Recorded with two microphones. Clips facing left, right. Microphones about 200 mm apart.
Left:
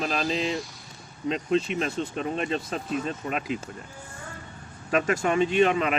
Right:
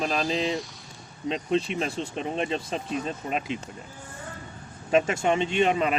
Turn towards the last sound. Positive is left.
turn(degrees=-30)  # may be behind; listen again after turning